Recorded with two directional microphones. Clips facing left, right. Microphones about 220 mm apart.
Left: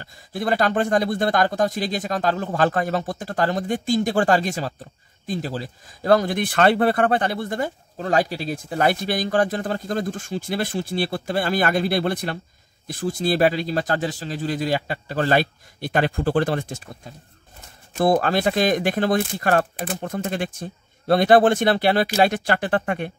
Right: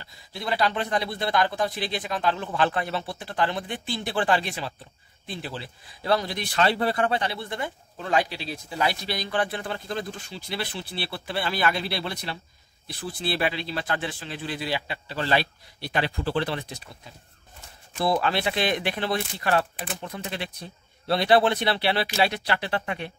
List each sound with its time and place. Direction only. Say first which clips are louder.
0.0 s speech: left 8 dB; 50° left (ahead or behind)